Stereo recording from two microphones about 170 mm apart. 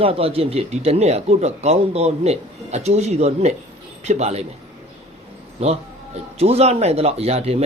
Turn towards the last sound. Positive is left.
turn(degrees=-35)  # may be behind; listen again after turning